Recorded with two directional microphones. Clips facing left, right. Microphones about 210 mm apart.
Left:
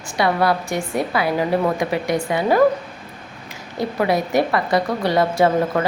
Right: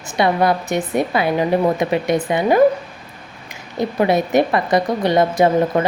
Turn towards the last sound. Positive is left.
turn(degrees=-20)  # may be behind; listen again after turning